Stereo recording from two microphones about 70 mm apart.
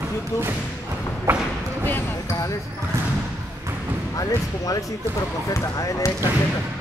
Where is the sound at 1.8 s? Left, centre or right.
Left.